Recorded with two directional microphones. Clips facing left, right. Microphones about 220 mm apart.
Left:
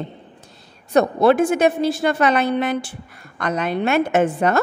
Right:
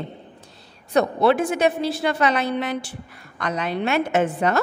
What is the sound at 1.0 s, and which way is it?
A woman's voice, 45° left (ahead or behind).